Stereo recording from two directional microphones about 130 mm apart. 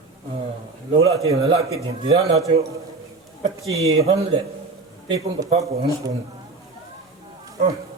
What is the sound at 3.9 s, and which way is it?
Speech, 50° right (ahead or behind).